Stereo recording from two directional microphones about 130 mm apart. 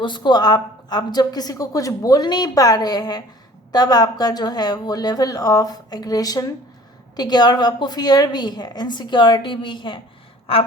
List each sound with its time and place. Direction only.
0.0 s a woman's voice: 35° left (ahead or behind)
10.4 s gasp: 45° left (ahead or behind)